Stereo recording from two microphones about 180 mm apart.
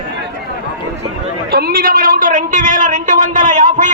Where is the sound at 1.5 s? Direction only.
60° right (ahead or behind).